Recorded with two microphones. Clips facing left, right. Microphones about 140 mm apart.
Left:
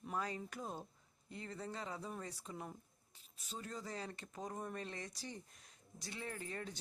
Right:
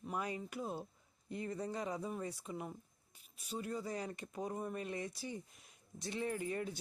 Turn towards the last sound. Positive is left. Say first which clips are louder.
# right 7 dB
turn(degrees=-10)  # may be behind; listen again after turning